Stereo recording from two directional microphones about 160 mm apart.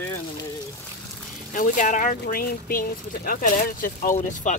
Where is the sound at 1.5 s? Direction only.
55° left (ahead or behind).